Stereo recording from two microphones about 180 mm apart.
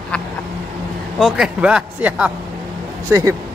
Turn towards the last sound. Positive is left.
turn(degrees=-15)  # may be behind; listen again after turning